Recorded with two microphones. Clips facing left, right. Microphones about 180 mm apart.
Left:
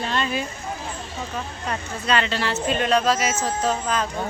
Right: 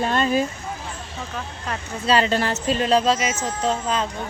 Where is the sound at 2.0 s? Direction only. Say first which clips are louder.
Right 4 dB; 35° right (ahead or behind).